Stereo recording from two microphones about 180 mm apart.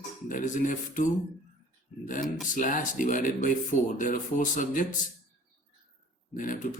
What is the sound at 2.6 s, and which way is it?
Speech, 45° left (ahead or behind).